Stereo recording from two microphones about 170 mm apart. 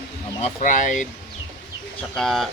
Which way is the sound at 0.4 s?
50° left (ahead or behind).